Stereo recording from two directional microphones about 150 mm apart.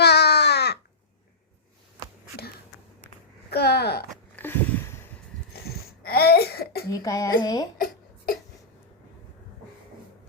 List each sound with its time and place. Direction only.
0.0 s crow: 90° left
3.5 s speech: 90° left
4.4 s a sound: 10° left (ahead or behind)
6.0 s cough: 90° left
6.9 s speech: 20° left (ahead or behind)